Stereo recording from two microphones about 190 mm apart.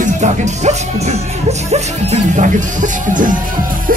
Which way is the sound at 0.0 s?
40° right (ahead or behind).